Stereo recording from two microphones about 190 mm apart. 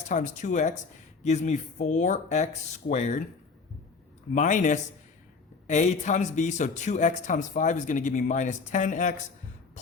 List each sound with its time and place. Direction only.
0.1 s a man's voice: 40° left (ahead or behind)
4.4 s a man's voice: 40° left (ahead or behind)